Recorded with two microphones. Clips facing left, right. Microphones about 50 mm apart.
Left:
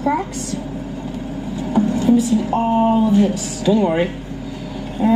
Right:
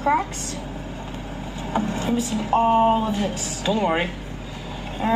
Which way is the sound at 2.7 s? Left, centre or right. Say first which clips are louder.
Left 4 dB; right.